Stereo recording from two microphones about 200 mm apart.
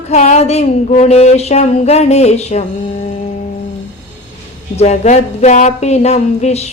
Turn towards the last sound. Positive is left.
turn(degrees=30)  # may be behind; listen again after turning